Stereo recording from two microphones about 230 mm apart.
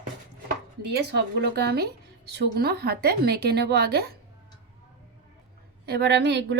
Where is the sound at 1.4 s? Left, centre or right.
Right.